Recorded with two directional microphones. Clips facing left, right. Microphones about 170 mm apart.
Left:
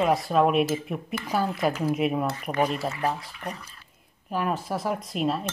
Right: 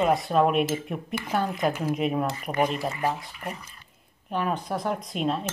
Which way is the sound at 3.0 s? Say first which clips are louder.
Even; 10° right (ahead or behind).